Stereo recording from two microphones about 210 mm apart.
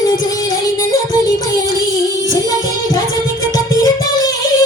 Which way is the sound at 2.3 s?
20° left (ahead or behind).